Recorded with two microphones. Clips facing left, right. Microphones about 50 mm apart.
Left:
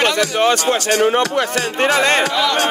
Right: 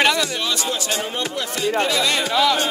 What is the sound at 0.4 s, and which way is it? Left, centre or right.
Speech, left.